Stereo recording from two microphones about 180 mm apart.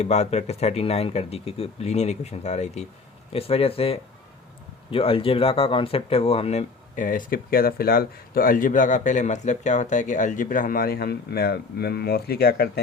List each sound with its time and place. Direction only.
0.0 s speech: 35° left (ahead or behind); by 12.8 s 60° left (ahead or behind)